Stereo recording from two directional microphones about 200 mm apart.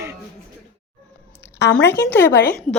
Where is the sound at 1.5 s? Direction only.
60° left (ahead or behind).